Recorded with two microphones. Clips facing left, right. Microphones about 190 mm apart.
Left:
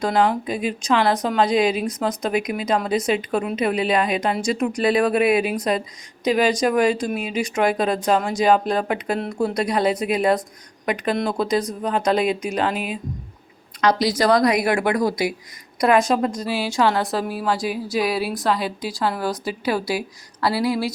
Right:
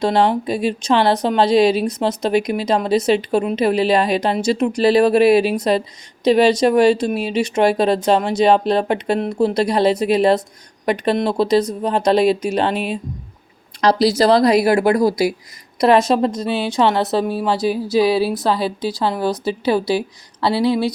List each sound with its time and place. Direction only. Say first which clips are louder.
0.0 s speech: right 3 dB; 30° right (ahead or behind)